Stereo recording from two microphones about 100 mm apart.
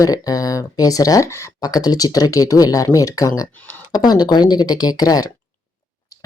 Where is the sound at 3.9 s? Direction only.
45° left (ahead or behind).